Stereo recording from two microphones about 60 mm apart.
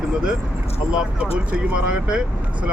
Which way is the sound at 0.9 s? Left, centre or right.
Centre.